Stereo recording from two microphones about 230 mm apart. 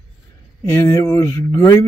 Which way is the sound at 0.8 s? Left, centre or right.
Centre.